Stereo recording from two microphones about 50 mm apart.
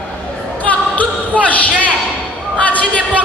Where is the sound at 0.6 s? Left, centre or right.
Left.